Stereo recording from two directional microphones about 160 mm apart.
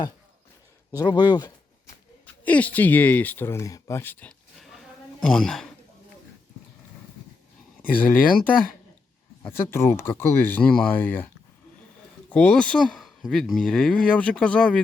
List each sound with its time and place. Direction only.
0.9 s speech: 25° left (ahead or behind)
2.2 s speech: 10° left (ahead or behind)
7.8 s speech: 10° left (ahead or behind)
9.4 s speech: 15° left (ahead or behind)
12.3 s speech: 10° left (ahead or behind)